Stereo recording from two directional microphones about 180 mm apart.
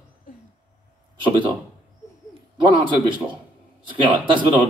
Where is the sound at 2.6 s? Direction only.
25° right (ahead or behind).